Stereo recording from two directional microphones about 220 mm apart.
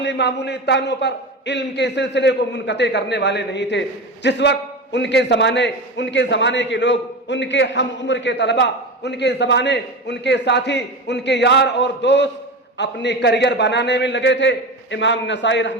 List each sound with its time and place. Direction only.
0.0 s a man's voice: 50° left (ahead or behind)